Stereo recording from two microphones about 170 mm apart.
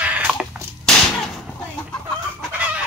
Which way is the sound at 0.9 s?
5° left (ahead or behind).